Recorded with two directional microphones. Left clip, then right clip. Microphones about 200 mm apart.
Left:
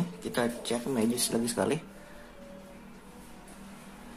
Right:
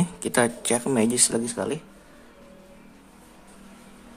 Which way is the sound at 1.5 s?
5° right (ahead or behind).